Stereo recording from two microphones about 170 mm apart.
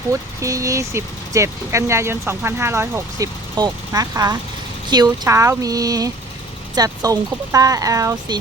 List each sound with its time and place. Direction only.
0.1 s speech: 20° right (ahead or behind)